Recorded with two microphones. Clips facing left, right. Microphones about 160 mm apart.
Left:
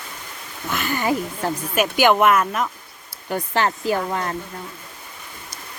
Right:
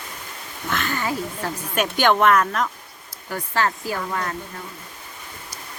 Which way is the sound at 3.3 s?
20° left (ahead or behind).